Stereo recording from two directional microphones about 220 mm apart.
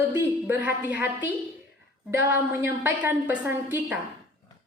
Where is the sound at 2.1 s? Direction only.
10° right (ahead or behind).